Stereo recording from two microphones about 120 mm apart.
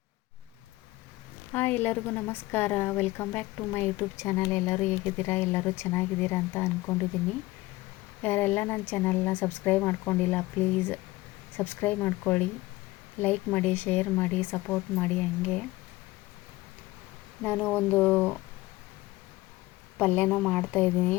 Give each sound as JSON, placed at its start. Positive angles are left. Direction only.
{"t": 1.5, "sound": "speech", "side_deg": 15}
{"t": 8.2, "sound": "speech", "side_deg": 15}
{"t": 17.4, "sound": "speech", "side_deg": 15}
{"t": 20.0, "sound": "speech", "side_deg": 15}